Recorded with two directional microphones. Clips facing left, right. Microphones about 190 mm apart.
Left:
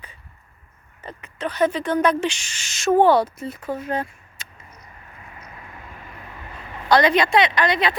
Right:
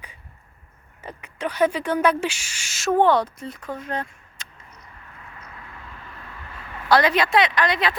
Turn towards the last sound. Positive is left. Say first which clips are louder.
# left 2 dB
turn(degrees=0)  # may be behind; listen again after turning